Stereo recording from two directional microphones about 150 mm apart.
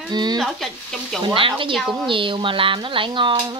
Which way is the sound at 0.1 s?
30° right (ahead or behind).